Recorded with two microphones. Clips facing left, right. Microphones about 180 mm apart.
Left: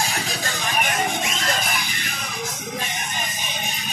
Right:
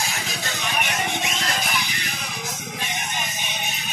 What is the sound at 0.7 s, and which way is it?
Music, 50° left (ahead or behind).